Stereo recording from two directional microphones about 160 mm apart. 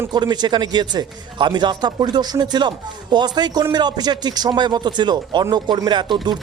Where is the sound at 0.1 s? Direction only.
25° right (ahead or behind).